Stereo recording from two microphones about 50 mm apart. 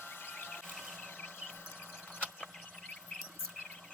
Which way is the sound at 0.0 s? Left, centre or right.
Left.